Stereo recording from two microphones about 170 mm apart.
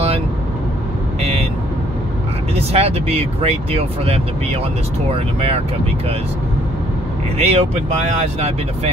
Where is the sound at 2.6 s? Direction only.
35° right (ahead or behind).